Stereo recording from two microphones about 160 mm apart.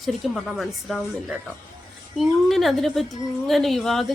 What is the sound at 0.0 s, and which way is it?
A woman's voice, centre (ahead or behind).